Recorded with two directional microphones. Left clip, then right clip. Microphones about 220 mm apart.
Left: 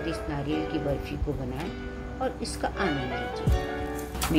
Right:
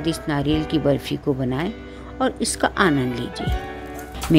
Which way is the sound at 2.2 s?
55° right (ahead or behind).